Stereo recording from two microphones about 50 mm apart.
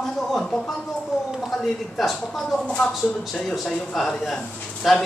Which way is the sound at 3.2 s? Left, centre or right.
Centre.